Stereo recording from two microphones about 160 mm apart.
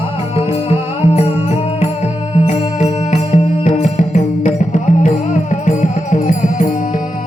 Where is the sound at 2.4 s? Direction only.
45° left (ahead or behind).